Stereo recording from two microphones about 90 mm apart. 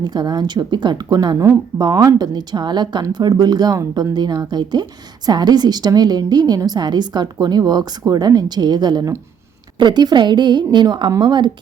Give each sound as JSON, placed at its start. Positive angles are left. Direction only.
{"t": 0.0, "sound": "a woman's voice", "side_deg": -55}